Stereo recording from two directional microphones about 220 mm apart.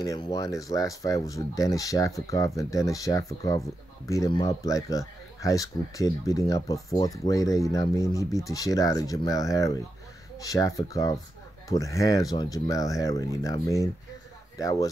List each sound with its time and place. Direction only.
0.0 s speech: 15° left (ahead or behind)